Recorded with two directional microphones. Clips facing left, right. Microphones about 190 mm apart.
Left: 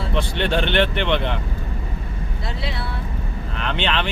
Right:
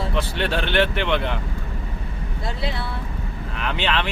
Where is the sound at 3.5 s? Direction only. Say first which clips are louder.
Left 1 dB; 5° right (ahead or behind).